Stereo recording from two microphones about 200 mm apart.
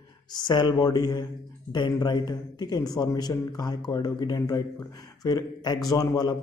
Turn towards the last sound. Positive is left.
turn(degrees=15)  # may be behind; listen again after turning